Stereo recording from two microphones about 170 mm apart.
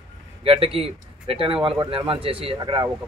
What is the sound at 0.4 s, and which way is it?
Speech, 35° right (ahead or behind).